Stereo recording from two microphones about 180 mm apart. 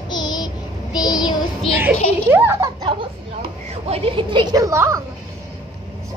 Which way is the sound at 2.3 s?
10° right (ahead or behind).